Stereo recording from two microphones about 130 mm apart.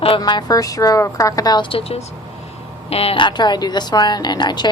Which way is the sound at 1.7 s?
50° left (ahead or behind).